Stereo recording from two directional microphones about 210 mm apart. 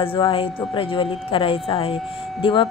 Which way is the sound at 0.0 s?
25° left (ahead or behind).